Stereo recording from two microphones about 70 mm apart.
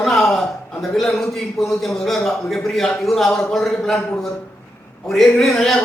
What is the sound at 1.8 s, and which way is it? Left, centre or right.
Speech, centre.